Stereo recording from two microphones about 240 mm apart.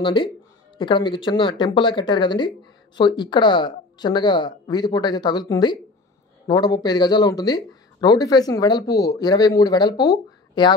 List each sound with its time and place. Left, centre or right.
0.0 s speech: centre